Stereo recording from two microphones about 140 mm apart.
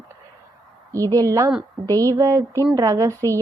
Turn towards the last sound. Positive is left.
turn(degrees=-25)  # may be behind; listen again after turning